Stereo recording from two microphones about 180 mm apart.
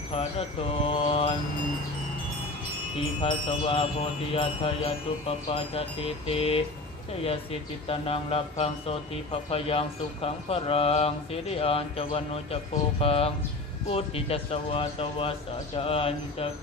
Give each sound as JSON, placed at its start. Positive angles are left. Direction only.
{"t": 0.1, "sound": "speech", "side_deg": 30}
{"t": 3.2, "sound": "speech", "side_deg": 30}
{"t": 7.9, "sound": "speech", "side_deg": 30}